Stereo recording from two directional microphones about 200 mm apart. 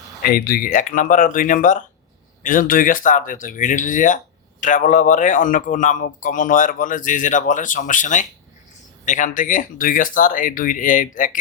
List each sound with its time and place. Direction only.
0.2 s a man's voice: 50° left (ahead or behind)